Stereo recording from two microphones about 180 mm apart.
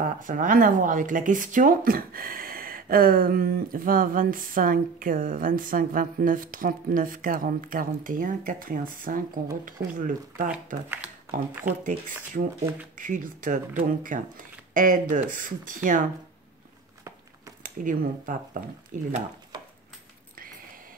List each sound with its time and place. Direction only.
0.0 s speech: 45° right (ahead or behind)
11.8 s speech: 45° right (ahead or behind)
17.6 s speech: 45° right (ahead or behind)